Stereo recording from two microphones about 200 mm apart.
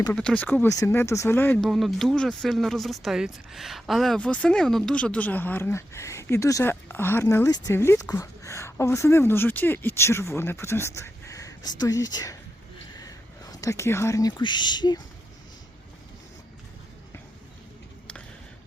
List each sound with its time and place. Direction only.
0.2 s speech: 5° left (ahead or behind)